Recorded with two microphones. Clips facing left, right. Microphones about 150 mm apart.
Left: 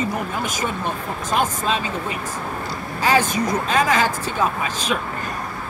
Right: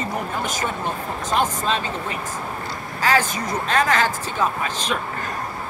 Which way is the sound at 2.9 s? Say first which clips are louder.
Left 2 dB; 15° left (ahead or behind).